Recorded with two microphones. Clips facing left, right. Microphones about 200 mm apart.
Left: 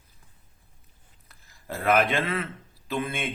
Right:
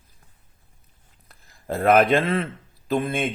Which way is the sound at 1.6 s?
50° right (ahead or behind).